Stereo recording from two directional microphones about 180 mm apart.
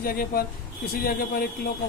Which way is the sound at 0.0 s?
55° left (ahead or behind).